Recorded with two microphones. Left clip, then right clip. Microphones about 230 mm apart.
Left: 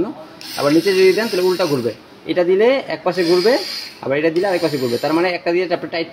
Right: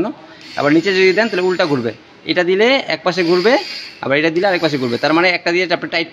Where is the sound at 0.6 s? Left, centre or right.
Right.